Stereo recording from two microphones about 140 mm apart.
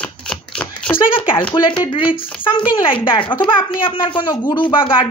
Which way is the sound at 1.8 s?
35° left (ahead or behind).